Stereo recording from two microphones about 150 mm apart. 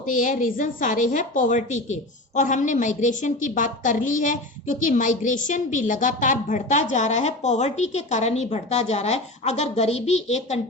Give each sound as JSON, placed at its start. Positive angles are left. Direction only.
{"t": 0.0, "sound": "a woman's voice", "side_deg": 60}